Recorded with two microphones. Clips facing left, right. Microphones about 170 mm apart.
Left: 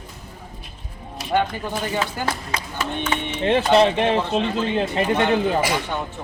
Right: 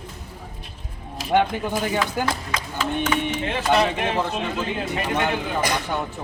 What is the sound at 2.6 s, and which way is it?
Speech, 90° right.